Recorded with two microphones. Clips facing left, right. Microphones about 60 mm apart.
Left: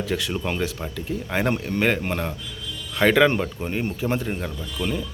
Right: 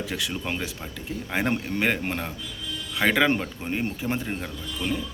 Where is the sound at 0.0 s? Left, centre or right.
Centre.